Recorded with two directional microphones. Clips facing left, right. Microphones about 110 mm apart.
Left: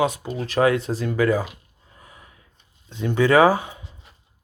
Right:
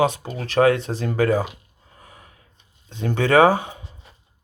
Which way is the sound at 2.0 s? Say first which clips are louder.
Right 1 dB; 40° right (ahead or behind).